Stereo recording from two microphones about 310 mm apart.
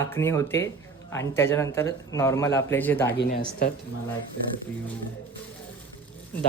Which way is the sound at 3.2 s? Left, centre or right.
Left.